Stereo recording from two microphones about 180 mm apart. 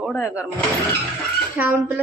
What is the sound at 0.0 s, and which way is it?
Speech, 5° left (ahead or behind).